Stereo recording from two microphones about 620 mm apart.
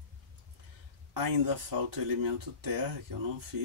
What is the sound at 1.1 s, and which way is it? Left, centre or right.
Speech, right.